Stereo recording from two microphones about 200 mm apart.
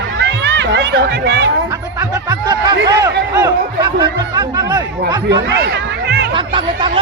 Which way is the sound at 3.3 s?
20° right (ahead or behind).